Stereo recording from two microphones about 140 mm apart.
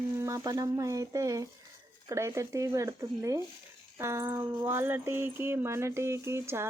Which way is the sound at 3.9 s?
20° right (ahead or behind).